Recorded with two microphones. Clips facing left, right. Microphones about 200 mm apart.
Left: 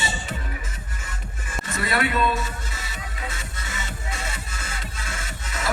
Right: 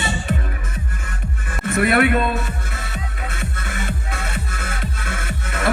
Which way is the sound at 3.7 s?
60° right (ahead or behind).